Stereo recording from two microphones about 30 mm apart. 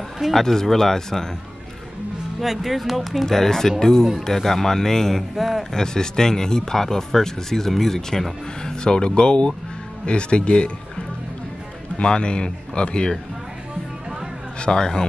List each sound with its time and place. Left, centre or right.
0.3 s speech: centre
2.4 s speech: centre
3.3 s speech: centre
5.3 s speech: centre
5.7 s speech: left
12.0 s speech: left
14.7 s speech: left